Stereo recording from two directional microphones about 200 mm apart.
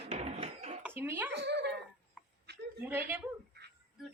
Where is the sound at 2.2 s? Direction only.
5° right (ahead or behind).